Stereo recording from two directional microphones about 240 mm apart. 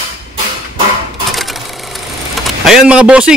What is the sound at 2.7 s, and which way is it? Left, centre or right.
Speech, centre.